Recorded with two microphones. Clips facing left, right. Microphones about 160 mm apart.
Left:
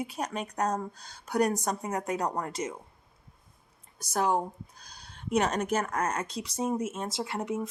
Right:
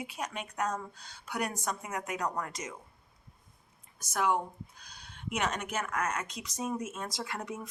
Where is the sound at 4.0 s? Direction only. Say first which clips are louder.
Left 3 dB; 35° left (ahead or behind).